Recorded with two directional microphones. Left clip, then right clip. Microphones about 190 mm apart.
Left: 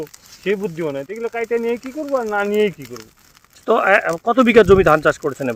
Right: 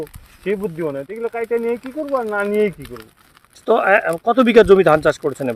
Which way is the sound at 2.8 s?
35° left (ahead or behind).